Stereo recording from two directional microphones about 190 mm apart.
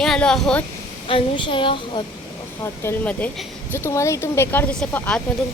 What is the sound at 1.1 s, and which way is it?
Speech, 25° left (ahead or behind).